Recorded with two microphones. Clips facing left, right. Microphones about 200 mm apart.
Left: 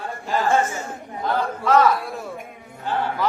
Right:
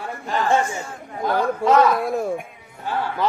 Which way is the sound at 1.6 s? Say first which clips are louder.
Right 2 dB; 45° right (ahead or behind).